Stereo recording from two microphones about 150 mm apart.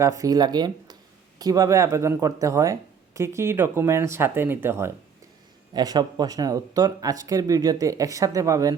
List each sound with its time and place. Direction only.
0.0 s speech: 20° right (ahead or behind)
5.7 s speech: 25° right (ahead or behind)